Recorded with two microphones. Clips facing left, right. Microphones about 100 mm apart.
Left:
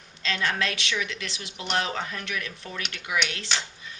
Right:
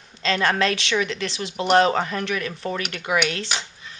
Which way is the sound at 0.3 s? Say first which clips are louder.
Right 7 dB; 55° right (ahead or behind).